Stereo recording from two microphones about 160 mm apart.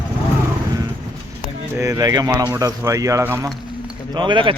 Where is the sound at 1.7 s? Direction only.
20° right (ahead or behind).